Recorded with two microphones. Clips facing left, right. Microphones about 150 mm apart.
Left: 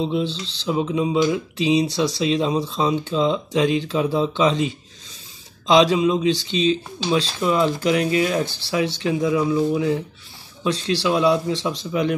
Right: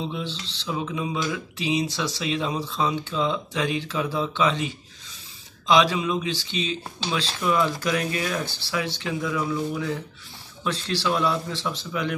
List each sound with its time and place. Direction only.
0.7 s speech: 25° left (ahead or behind)